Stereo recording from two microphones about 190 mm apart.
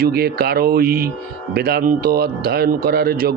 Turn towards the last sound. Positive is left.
turn(degrees=-55)  # may be behind; listen again after turning